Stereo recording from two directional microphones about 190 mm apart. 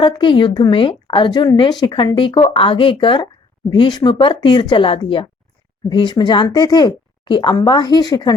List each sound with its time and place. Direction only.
0.0 s speech: 25° left (ahead or behind)